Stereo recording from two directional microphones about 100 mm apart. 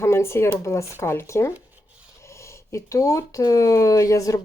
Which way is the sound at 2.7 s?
35° left (ahead or behind).